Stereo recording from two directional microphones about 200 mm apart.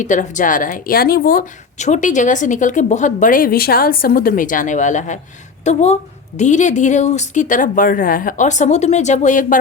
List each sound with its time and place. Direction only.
0.0 s speech: 40° left (ahead or behind)